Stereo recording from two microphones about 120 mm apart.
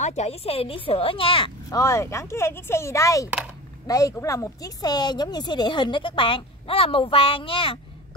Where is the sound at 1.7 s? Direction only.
25° left (ahead or behind).